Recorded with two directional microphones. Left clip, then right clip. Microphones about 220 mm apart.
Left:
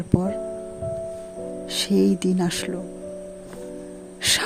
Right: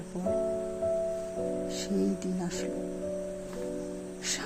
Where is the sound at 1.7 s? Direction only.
45° left (ahead or behind).